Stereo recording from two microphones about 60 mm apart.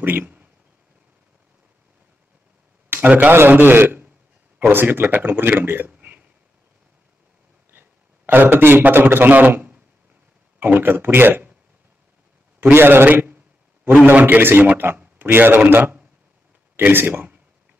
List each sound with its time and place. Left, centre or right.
0.0 s speech: right
2.9 s speech: right
5.9 s hiccup: right
7.7 s a man's voice: right
12.7 s a man's voice: right
16.7 s speech: right